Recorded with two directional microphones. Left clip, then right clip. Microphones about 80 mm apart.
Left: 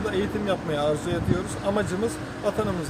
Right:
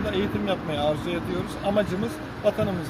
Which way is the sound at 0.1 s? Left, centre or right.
Left.